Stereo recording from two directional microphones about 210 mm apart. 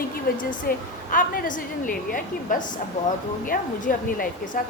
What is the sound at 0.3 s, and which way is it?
A woman's voice, 40° left (ahead or behind).